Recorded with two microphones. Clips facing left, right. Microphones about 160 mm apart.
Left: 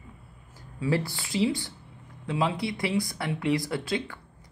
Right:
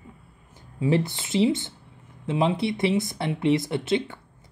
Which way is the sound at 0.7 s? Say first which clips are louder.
Right 4 dB; 20° right (ahead or behind).